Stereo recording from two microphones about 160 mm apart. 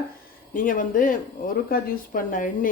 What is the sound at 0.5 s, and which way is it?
Speech, 55° left (ahead or behind).